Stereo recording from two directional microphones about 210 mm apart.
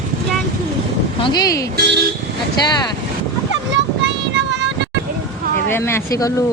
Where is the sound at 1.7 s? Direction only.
55° right (ahead or behind).